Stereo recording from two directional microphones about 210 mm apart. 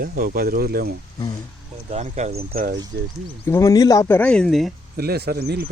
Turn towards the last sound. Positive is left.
turn(degrees=-50)  # may be behind; listen again after turning